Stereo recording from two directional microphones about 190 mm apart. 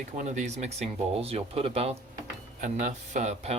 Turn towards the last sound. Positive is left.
turn(degrees=-35)  # may be behind; listen again after turning